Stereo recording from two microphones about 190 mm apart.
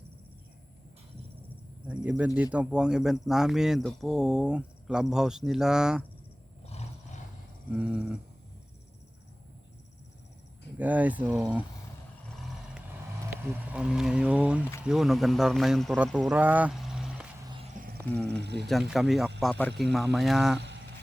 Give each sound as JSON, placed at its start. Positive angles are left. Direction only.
{"t": 1.9, "sound": "speech", "side_deg": -10}
{"t": 6.7, "sound": "roar", "side_deg": 35}
{"t": 7.7, "sound": "speech", "side_deg": -5}
{"t": 10.8, "sound": "speech", "side_deg": -10}
{"t": 13.5, "sound": "speech", "side_deg": -5}
{"t": 17.9, "sound": "cricket", "side_deg": 5}
{"t": 18.3, "sound": "speech", "side_deg": -65}
{"t": 18.7, "sound": "speech", "side_deg": 0}